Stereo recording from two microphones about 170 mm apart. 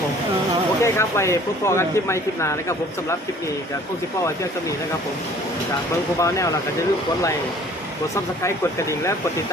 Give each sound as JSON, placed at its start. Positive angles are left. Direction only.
{"t": 0.8, "sound": "speech", "side_deg": 15}
{"t": 6.1, "sound": "speech", "side_deg": 20}
{"t": 8.1, "sound": "speech", "side_deg": 15}